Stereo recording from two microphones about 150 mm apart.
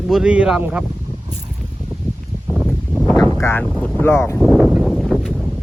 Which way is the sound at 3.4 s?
15° left (ahead or behind).